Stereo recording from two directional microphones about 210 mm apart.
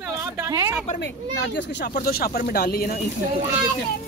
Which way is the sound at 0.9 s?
55° left (ahead or behind).